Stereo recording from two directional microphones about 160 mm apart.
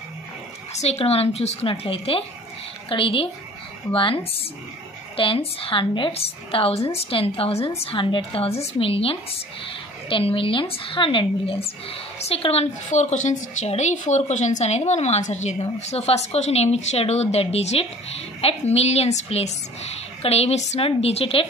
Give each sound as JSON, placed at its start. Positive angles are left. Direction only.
{"t": 0.7, "sound": "a woman's voice", "side_deg": 40}